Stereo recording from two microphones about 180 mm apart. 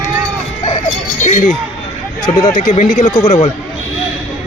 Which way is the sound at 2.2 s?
20° left (ahead or behind).